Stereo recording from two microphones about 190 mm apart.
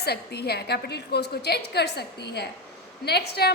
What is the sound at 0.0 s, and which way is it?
A woman's voice, 60° left (ahead or behind).